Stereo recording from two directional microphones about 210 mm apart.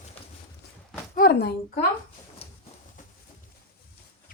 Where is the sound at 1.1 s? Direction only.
45° left (ahead or behind).